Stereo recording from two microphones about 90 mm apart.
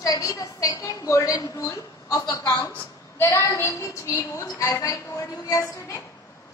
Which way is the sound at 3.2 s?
30° left (ahead or behind).